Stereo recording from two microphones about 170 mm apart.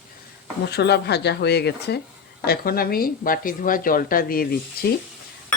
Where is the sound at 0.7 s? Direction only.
80° left.